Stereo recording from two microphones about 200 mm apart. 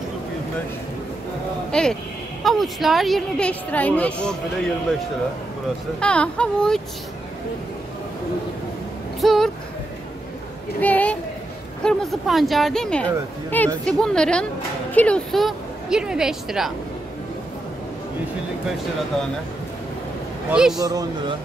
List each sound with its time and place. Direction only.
1.7 s a woman's voice: 5° left (ahead or behind)
5.9 s a woman's voice: 5° left (ahead or behind)
9.2 s speech: centre (ahead or behind)
10.8 s a sound: 10° left (ahead or behind)
11.8 s a woman's voice: 5° left (ahead or behind)
20.5 s a woman's voice: 5° right (ahead or behind)
20.8 s speech: 20° right (ahead or behind)